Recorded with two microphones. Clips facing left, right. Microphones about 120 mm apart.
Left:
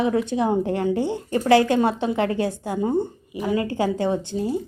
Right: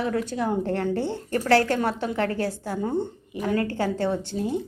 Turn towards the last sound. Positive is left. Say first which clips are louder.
# left 2 dB
turn(degrees=5)  # may be behind; listen again after turning